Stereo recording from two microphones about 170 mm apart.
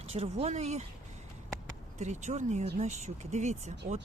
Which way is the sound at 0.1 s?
40° right (ahead or behind).